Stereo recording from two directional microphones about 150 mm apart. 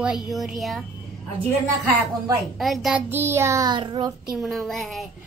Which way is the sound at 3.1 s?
15° right (ahead or behind).